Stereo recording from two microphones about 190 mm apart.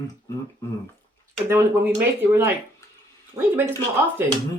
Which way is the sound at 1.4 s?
15° right (ahead or behind).